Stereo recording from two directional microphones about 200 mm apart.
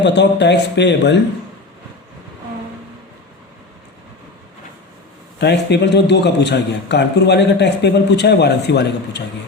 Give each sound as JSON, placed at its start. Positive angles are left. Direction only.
{"t": 0.0, "sound": "a man's voice", "side_deg": 60}
{"t": 5.4, "sound": "a man's voice", "side_deg": 60}